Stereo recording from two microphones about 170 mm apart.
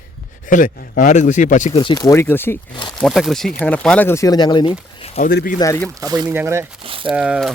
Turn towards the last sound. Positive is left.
turn(degrees=-5)  # may be behind; listen again after turning